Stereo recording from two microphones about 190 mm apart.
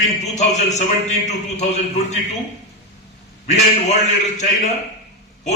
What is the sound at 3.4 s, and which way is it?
A man's voice, 40° left (ahead or behind).